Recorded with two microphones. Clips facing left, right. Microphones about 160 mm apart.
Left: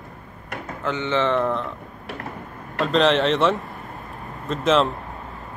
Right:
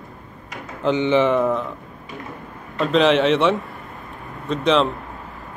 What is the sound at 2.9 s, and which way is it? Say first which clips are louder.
A man's voice: right 3 dB; centre (ahead or behind).